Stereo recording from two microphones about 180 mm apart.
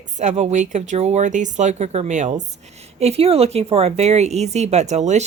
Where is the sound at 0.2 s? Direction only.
40° right (ahead or behind).